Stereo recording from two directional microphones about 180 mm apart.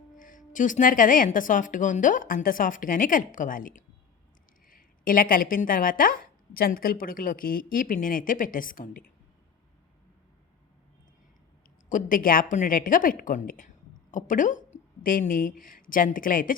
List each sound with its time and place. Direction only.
0.2 s speech: 45° left (ahead or behind)
11.9 s speech: 45° left (ahead or behind)